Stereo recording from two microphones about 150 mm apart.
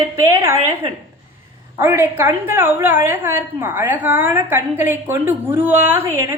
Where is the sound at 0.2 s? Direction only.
20° right (ahead or behind).